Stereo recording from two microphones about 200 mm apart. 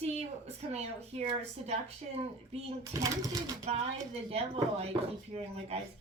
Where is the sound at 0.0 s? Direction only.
30° right (ahead or behind).